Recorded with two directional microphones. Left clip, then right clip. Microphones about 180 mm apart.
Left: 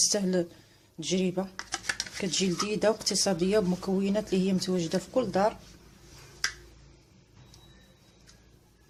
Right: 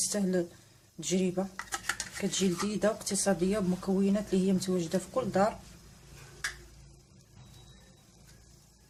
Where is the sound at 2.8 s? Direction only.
30° left (ahead or behind).